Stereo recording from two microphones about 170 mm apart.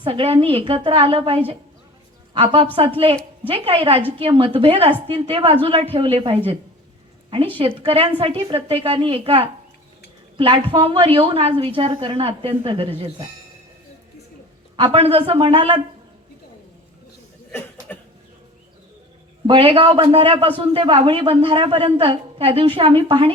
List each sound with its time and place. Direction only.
0.0 s a woman's voice: 30° right (ahead or behind)
14.9 s a woman's voice: 35° right (ahead or behind)
19.5 s a woman's voice: 35° right (ahead or behind)